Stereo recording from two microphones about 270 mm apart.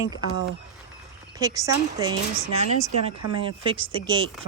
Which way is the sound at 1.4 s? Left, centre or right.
Centre.